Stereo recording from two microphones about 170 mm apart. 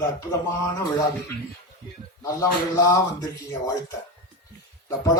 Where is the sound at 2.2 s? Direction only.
20° left (ahead or behind).